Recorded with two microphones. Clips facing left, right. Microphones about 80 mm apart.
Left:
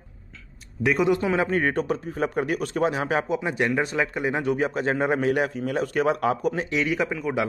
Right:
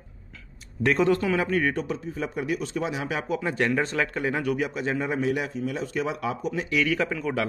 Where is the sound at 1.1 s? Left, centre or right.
Left.